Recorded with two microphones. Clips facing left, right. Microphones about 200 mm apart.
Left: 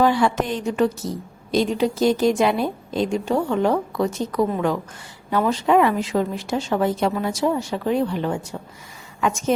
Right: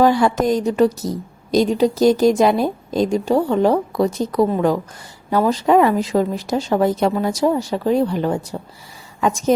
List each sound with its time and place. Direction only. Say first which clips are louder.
0.0 s a woman's voice: right 4 dB; 40° right (ahead or behind)